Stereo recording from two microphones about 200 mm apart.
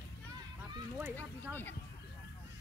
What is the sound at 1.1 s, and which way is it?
Speech, 10° left (ahead or behind).